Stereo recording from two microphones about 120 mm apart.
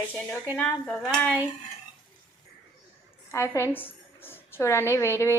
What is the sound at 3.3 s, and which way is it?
A woman's voice, 25° left (ahead or behind).